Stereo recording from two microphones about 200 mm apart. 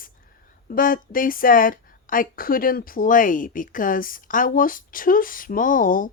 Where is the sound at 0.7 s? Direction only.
45° left (ahead or behind).